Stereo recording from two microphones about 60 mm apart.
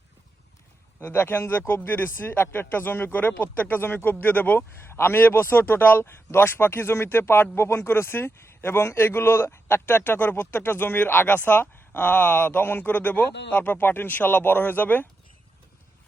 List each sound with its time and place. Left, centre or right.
1.1 s speech: left